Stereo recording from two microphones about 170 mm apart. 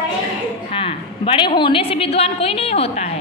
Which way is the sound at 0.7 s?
30° left (ahead or behind).